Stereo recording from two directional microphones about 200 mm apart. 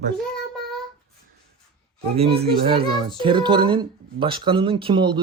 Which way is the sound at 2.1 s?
30° right (ahead or behind).